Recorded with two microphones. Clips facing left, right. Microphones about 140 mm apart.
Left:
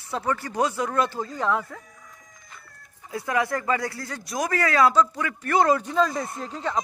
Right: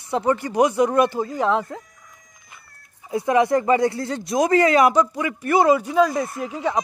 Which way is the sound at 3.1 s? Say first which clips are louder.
Right 8 dB; 20° right (ahead or behind).